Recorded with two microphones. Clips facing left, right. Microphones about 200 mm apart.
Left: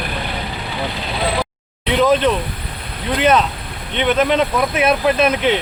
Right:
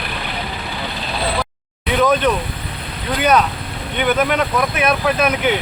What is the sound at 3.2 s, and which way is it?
Speech, 25° left (ahead or behind).